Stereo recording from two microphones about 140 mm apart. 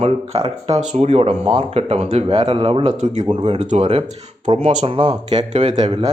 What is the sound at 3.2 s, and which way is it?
Speech, 35° right (ahead or behind).